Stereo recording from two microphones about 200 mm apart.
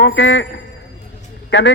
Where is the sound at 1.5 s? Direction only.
65° left (ahead or behind).